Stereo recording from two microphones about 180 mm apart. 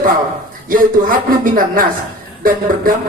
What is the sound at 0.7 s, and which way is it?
A man's voice, 50° right (ahead or behind).